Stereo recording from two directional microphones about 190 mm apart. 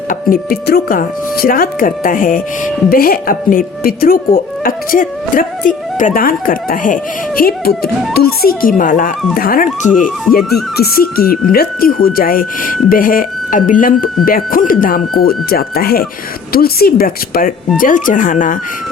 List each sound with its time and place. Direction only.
0.1 s speech: 50° left (ahead or behind)